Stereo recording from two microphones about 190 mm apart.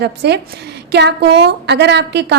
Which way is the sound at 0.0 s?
60° right (ahead or behind).